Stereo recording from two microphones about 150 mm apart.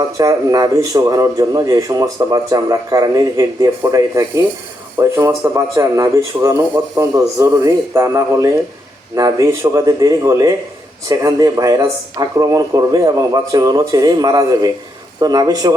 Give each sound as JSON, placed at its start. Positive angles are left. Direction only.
{"t": 0.2, "sound": "a man's voice", "side_deg": -25}